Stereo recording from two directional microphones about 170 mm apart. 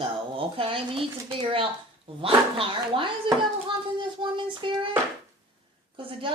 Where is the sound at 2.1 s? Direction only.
30° right (ahead or behind).